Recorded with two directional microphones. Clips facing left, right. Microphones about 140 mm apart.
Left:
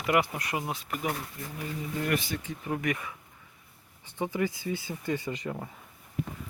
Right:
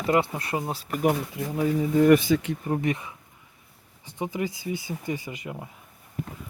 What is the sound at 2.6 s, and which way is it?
Speech, 30° right (ahead or behind).